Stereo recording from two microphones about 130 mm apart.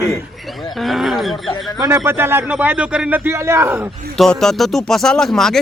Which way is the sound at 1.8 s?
20° right (ahead or behind).